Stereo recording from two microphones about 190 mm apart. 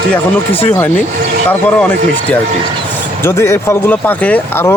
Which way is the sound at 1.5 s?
10° left (ahead or behind).